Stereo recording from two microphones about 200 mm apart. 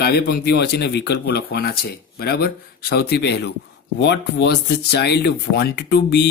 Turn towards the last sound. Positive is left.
turn(degrees=55)  # may be behind; listen again after turning